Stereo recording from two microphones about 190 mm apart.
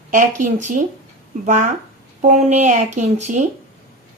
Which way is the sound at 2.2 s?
40° right (ahead or behind).